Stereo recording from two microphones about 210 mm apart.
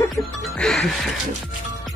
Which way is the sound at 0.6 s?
5° left (ahead or behind).